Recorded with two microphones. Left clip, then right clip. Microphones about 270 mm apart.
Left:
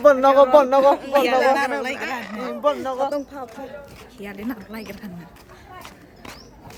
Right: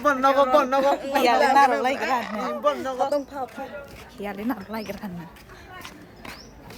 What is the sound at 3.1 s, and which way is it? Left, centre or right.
Speech, centre.